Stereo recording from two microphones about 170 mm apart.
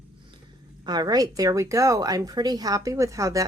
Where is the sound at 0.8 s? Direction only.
25° right (ahead or behind).